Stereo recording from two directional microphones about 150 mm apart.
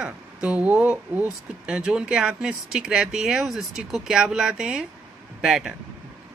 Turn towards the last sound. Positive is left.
turn(degrees=-5)  # may be behind; listen again after turning